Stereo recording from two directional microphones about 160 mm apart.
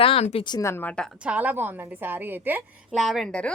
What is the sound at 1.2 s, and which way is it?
A woman's voice, 10° right (ahead or behind).